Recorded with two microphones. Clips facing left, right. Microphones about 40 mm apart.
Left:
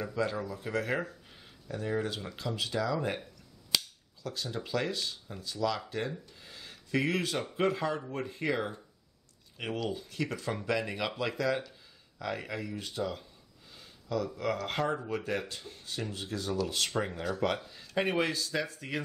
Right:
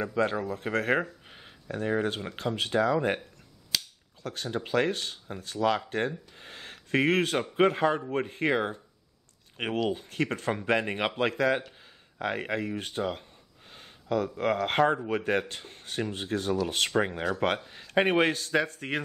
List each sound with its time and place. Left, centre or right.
0.0 s speech: right
4.2 s speech: right
9.8 s speech: right